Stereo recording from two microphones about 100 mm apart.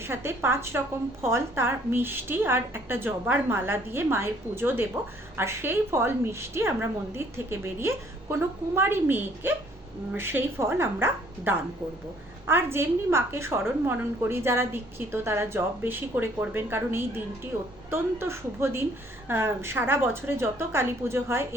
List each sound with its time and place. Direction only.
0.0 s a woman's voice: 25° right (ahead or behind)